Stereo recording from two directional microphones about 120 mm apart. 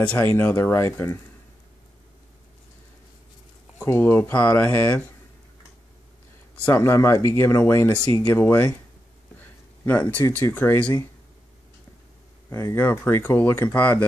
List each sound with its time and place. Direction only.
0.2 s speech: 15° left (ahead or behind)
3.8 s speech: 20° left (ahead or behind)
6.6 s speech: 20° left (ahead or behind)
9.4 s a sound: 15° left (ahead or behind)
10.1 s speech: 20° left (ahead or behind)
12.4 s speech: 20° left (ahead or behind)